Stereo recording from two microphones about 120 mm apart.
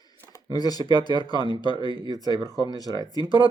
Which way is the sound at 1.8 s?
45° right (ahead or behind).